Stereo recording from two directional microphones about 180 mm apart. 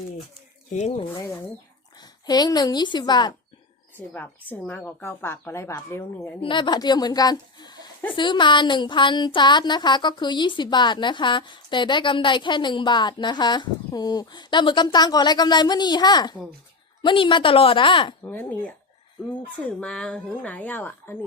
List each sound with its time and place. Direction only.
0.7 s speech: 35° left (ahead or behind)
3.9 s a woman's voice: 10° left (ahead or behind)
6.4 s speech: 25° left (ahead or behind)
18.2 s a woman's voice: 10° left (ahead or behind)